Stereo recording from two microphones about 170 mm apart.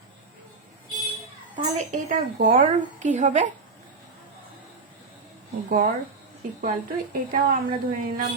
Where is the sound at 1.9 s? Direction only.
45° right (ahead or behind).